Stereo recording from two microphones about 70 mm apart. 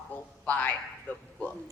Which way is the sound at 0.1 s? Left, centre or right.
Left.